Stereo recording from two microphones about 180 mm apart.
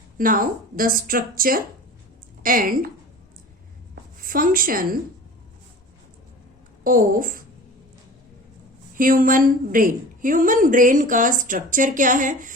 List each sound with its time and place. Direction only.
0.2 s a woman's voice: 50° right (ahead or behind)
4.2 s a woman's voice: 50° right (ahead or behind)
6.8 s a woman's voice: 50° right (ahead or behind)
9.0 s a woman's voice: 50° right (ahead or behind)